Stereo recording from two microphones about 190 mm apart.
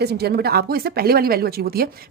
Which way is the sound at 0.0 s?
60° right (ahead or behind).